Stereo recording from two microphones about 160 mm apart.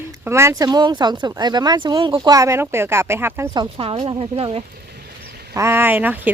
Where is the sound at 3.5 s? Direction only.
30° right (ahead or behind).